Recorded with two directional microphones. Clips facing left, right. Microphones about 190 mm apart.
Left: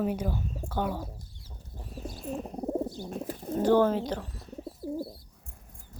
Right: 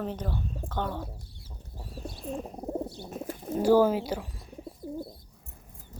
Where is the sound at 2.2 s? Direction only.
Centre (ahead or behind).